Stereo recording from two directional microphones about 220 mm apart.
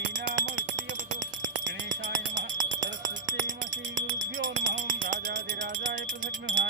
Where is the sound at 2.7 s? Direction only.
60° right (ahead or behind).